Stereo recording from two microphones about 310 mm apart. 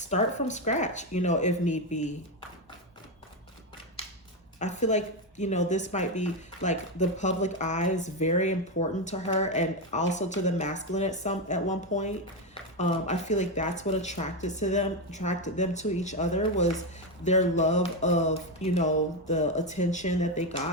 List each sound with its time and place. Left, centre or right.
0.0 s speech: left
4.0 s a sound: centre
4.6 s speech: left